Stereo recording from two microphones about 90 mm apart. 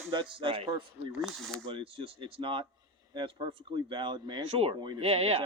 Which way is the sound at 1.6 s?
80° right.